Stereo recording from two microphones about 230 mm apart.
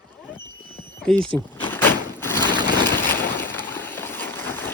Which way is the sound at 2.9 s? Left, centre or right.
Left.